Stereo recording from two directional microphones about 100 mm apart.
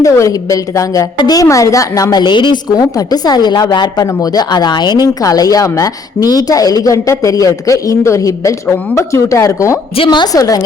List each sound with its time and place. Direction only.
0.0 s a woman's voice: 35° left (ahead or behind)
10.0 s a woman's voice: 50° left (ahead or behind)
10.3 s a woman's voice: 35° left (ahead or behind)